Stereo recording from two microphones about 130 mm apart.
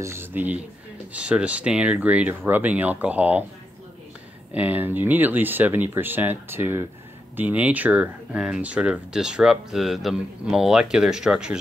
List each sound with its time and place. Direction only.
0.0 s speech: 20° right (ahead or behind)
4.5 s speech: 10° right (ahead or behind)